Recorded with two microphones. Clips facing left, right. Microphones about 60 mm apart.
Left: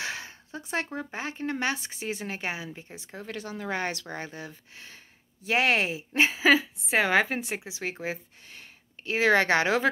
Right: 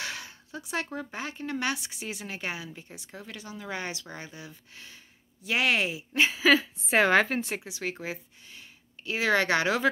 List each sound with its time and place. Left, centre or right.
0.0 s a sound: left
0.9 s speech: left
6.5 s speech: centre; by 9.8 s left